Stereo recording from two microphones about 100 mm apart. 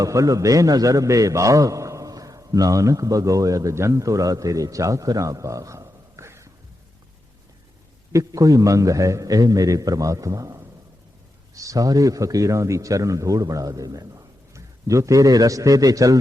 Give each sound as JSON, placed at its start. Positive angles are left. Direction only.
{"t": 0.0, "sound": "a man's voice", "side_deg": -35}
{"t": 8.1, "sound": "a man's voice", "side_deg": -35}